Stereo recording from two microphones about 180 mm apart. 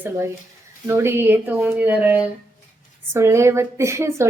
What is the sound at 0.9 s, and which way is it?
Speech, 15° right (ahead or behind).